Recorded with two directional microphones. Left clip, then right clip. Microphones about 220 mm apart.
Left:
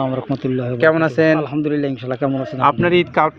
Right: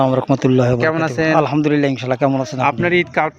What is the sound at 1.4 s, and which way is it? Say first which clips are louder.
A man's voice: right 4 dB; 50° right (ahead or behind).